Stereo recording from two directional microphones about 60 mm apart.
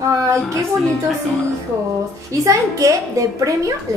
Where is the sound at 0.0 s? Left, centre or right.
Right.